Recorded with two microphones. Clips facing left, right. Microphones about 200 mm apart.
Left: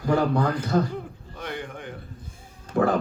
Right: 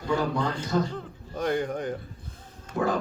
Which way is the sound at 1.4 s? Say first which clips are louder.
Right 8 dB; 40° right (ahead or behind).